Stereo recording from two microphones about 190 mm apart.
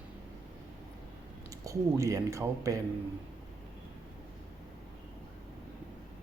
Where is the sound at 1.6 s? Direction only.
15° right (ahead or behind).